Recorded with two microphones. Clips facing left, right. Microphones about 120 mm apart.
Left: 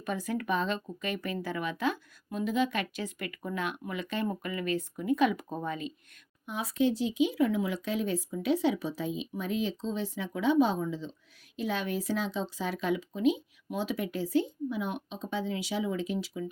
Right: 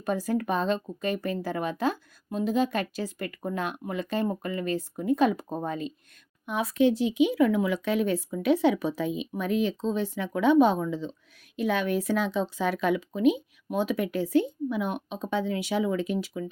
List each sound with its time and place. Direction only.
0.0 s a woman's voice: 35° right (ahead or behind)
6.4 s speech: 60° right (ahead or behind)